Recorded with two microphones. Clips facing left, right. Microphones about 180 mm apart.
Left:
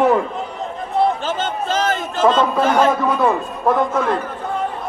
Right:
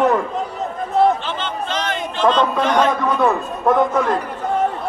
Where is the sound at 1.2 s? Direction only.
45° left (ahead or behind).